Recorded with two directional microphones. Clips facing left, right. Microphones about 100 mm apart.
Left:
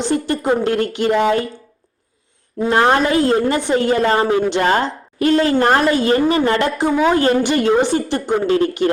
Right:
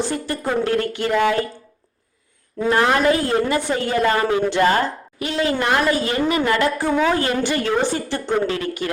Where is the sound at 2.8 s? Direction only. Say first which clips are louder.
Left 3 dB; 30° left (ahead or behind).